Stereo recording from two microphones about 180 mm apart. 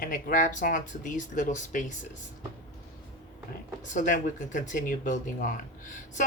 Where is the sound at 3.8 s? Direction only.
45° left (ahead or behind).